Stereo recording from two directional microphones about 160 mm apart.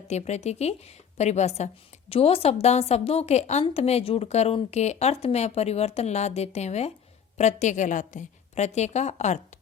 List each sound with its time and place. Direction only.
0.1 s a woman's voice: 45° left (ahead or behind)